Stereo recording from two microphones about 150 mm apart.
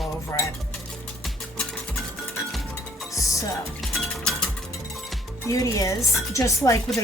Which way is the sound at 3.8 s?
Centre (ahead or behind).